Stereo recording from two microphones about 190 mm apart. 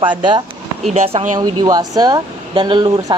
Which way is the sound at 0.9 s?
35° right (ahead or behind).